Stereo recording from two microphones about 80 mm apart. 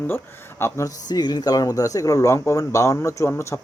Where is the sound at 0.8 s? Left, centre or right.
Left.